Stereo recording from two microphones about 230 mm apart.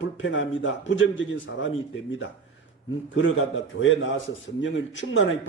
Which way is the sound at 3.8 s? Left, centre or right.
Left.